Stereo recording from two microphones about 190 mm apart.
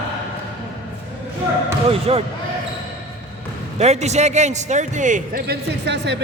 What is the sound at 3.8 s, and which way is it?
A man's voice, 35° right (ahead or behind).